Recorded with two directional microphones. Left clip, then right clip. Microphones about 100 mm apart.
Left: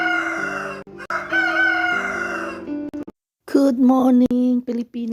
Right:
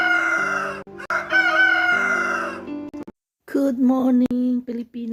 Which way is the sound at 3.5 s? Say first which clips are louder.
Left 4 dB; 40° left (ahead or behind).